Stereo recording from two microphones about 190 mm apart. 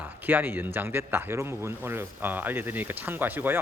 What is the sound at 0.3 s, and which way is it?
Speech, 10° right (ahead or behind).